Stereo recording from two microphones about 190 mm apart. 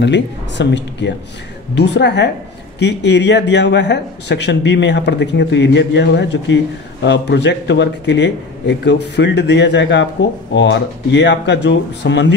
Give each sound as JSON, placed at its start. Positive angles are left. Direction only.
{"t": 0.0, "sound": "a man's voice", "side_deg": 65}